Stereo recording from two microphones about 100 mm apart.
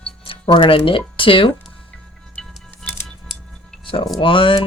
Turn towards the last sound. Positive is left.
turn(degrees=60)  # may be behind; listen again after turning